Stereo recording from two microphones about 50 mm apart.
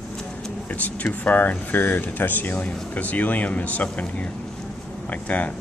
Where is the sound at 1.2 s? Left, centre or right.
Left.